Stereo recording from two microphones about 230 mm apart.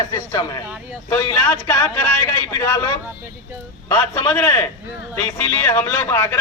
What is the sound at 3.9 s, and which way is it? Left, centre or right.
Speech, centre.